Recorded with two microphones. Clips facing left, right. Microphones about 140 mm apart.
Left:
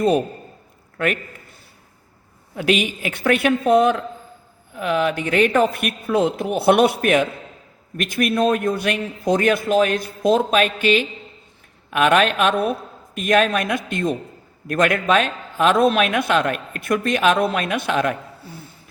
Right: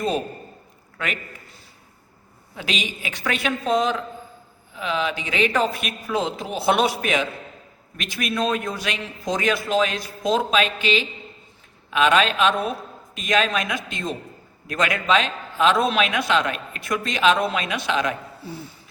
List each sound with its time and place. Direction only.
0.9 s a man's voice: 50° left (ahead or behind)
2.6 s a man's voice: 55° left (ahead or behind)